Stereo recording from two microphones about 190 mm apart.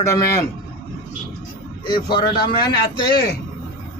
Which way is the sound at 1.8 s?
25° left (ahead or behind).